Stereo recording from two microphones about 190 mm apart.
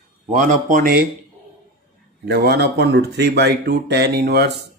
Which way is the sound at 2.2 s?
60° right (ahead or behind).